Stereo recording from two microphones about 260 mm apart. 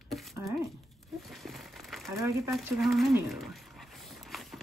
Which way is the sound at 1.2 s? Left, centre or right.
Centre.